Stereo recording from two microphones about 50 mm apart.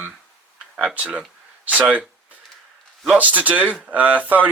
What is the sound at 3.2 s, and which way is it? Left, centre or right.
Speech, right.